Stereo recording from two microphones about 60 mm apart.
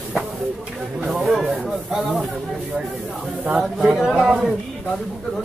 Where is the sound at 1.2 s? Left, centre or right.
Centre.